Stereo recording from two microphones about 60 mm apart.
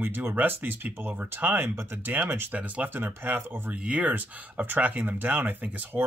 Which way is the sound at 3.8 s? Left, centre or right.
Right.